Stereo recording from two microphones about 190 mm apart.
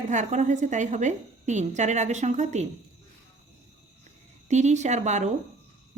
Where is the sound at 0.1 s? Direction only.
40° right (ahead or behind).